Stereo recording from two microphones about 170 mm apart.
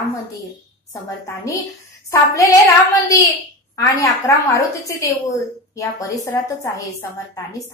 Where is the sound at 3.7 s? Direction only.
20° left (ahead or behind).